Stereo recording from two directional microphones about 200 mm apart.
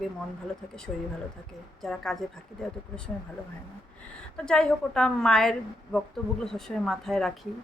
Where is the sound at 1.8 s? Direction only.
Centre (ahead or behind).